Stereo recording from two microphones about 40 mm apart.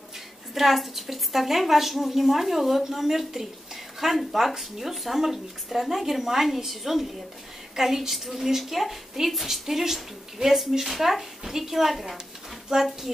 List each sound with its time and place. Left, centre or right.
0.6 s a woman's voice: centre